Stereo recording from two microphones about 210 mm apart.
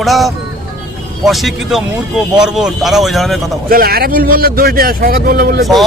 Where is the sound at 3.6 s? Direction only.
45° right (ahead or behind).